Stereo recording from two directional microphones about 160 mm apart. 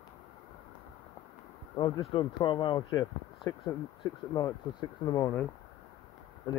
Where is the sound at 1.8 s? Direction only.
30° left (ahead or behind).